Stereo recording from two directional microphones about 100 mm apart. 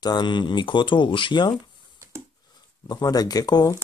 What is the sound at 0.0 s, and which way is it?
Speech, 45° left (ahead or behind).